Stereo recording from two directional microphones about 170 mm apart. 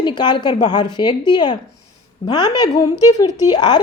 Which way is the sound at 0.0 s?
25° left (ahead or behind).